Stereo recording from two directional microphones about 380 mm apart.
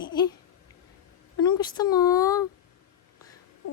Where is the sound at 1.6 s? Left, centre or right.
Centre.